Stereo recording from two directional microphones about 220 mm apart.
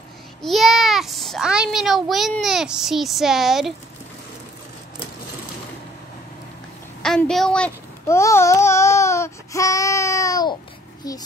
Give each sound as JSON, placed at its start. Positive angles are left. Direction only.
{"t": 0.4, "sound": "a child's voice", "side_deg": 0}
{"t": 7.0, "sound": "a child's voice", "side_deg": 5}